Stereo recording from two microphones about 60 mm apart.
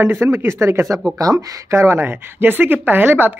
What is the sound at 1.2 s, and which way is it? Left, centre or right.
Speech, right.